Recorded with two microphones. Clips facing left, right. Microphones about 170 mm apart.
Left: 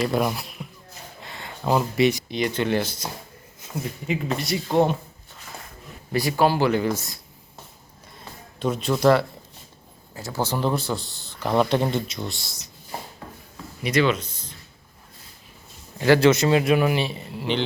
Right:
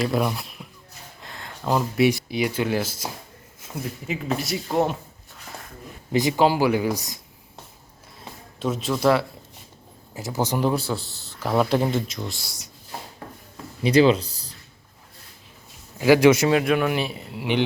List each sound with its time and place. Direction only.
0.0 s speech: centre (ahead or behind)
1.2 s a sound: centre (ahead or behind)
2.3 s a man's voice: 5° right (ahead or behind)
6.1 s speech: 20° right (ahead or behind)
8.5 s a man's voice: centre (ahead or behind)
10.2 s a man's voice: 20° right (ahead or behind); by 12.5 s centre (ahead or behind)
13.8 s speech: 30° right (ahead or behind)
16.0 s speech: 10° right (ahead or behind)
16.5 s a man's voice: centre (ahead or behind)